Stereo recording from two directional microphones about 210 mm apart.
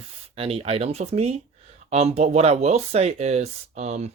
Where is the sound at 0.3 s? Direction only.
25° right (ahead or behind).